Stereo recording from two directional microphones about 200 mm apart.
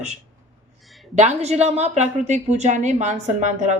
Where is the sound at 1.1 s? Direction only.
35° right (ahead or behind).